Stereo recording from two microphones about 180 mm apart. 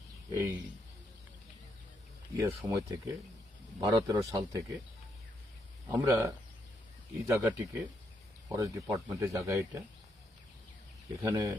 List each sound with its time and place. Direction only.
0.3 s speech: 15° right (ahead or behind)
2.4 s speech: 15° right (ahead or behind)
6.0 s speech: 20° right (ahead or behind)
11.2 s speech: 20° right (ahead or behind)